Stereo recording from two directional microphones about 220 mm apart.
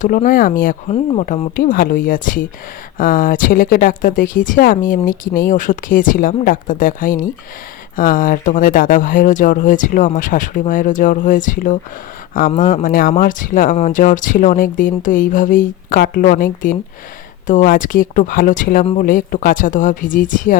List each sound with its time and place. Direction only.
0.0 s speech: 35° left (ahead or behind)